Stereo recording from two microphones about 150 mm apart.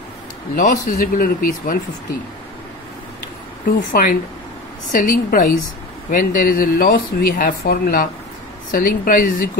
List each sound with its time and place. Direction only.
0.6 s speech: 65° left (ahead or behind)
3.9 s a woman's voice: 70° left (ahead or behind)
8.7 s speech: 70° left (ahead or behind)